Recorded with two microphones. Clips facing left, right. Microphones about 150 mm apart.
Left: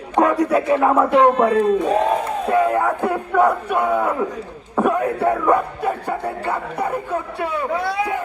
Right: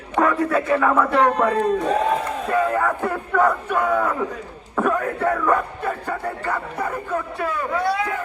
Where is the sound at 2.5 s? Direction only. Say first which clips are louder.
Left 3 dB; 15° left (ahead or behind).